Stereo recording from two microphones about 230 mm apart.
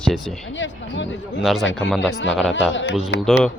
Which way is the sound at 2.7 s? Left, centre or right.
Left.